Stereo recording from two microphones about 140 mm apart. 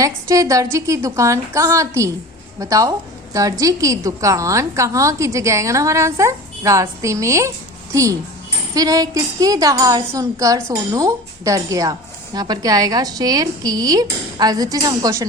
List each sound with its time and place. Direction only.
0.0 s a woman's voice: 25° right (ahead or behind)
8.7 s a woman's voice: 25° right (ahead or behind)